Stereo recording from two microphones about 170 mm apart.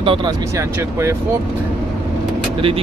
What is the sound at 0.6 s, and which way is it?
Speech, 15° right (ahead or behind).